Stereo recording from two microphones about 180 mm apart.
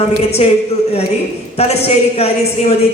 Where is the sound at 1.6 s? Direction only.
35° left (ahead or behind).